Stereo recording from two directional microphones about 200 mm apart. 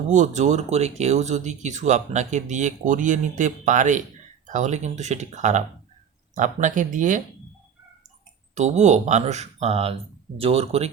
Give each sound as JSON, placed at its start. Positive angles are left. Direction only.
{"t": 0.1, "sound": "speech", "side_deg": -35}
{"t": 8.5, "sound": "speech", "side_deg": -35}